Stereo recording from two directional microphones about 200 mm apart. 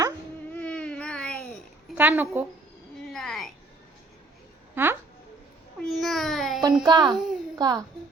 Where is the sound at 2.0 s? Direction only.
10° right (ahead or behind).